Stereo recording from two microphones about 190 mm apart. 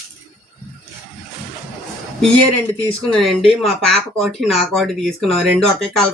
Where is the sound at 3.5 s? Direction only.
Centre (ahead or behind).